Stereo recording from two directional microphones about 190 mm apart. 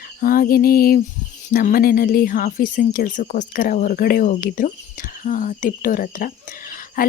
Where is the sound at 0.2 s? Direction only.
50° left (ahead or behind).